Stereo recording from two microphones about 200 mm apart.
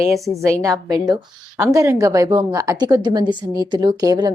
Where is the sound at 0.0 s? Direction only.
15° right (ahead or behind).